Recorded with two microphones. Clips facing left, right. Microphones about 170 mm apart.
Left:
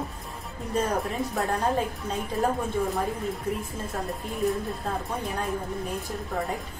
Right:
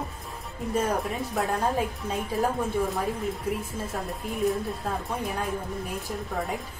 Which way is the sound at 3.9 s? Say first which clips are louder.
Left 1 dB; centre (ahead or behind).